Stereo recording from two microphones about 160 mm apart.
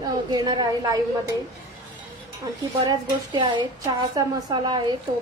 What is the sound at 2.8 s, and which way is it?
A woman's voice, 25° right (ahead or behind).